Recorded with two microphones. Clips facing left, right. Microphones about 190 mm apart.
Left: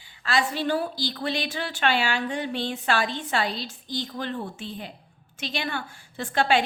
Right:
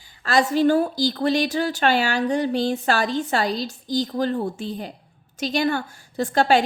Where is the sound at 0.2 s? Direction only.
40° right (ahead or behind).